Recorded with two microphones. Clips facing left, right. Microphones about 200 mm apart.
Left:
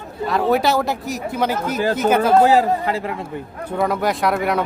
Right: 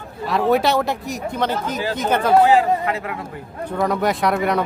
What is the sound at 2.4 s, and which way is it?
Speech, 40° left (ahead or behind).